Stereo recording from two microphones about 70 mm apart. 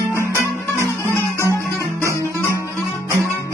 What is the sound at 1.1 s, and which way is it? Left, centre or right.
Music, left.